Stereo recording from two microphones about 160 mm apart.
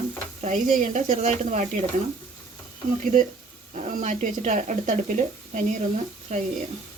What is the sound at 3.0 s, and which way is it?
Speech, 55° right (ahead or behind).